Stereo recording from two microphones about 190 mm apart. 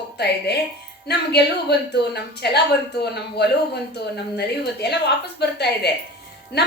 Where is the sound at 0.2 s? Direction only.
60° left (ahead or behind).